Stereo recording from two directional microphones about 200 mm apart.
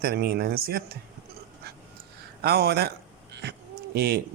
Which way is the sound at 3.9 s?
55° right (ahead or behind).